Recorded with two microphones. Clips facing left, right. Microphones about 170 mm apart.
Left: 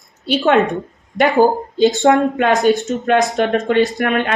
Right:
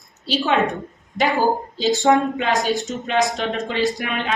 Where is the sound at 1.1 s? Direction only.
60° left (ahead or behind).